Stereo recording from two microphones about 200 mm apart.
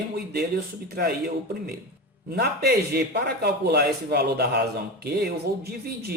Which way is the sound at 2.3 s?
55° right (ahead or behind).